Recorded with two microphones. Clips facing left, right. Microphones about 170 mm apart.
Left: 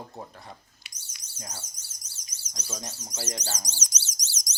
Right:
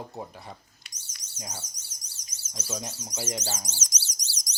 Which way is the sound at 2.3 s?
5° right (ahead or behind).